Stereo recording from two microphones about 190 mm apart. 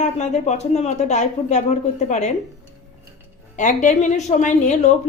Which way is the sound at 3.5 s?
40° left (ahead or behind).